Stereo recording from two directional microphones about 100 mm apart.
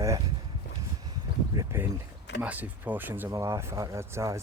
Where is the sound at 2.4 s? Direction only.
15° right (ahead or behind).